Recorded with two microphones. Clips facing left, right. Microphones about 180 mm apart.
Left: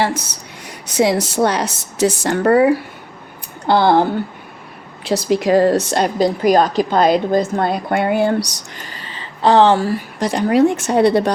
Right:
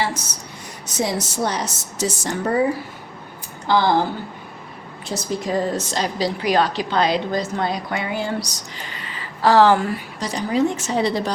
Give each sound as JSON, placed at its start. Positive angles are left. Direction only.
{"t": 0.0, "sound": "a woman's voice", "side_deg": 55}
{"t": 0.9, "sound": "a woman's voice", "side_deg": 70}
{"t": 3.7, "sound": "a woman's voice", "side_deg": 60}
{"t": 5.0, "sound": "a woman's voice", "side_deg": 75}
{"t": 8.9, "sound": "a sound", "side_deg": 30}
{"t": 10.2, "sound": "a woman's voice", "side_deg": 55}